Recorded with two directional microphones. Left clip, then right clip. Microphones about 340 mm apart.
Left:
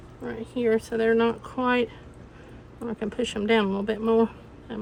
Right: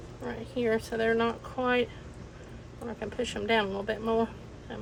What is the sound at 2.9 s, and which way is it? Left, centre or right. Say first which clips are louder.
Speech: left 4 dB; left.